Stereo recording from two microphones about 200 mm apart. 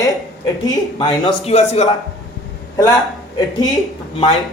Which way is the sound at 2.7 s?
20° left (ahead or behind).